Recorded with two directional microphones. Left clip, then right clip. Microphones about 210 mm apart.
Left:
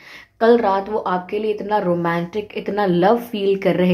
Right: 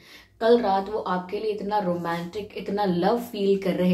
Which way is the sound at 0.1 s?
40° left (ahead or behind).